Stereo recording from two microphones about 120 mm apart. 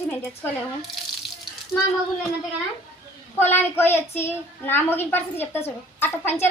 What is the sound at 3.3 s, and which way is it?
A child's voice, 20° left (ahead or behind).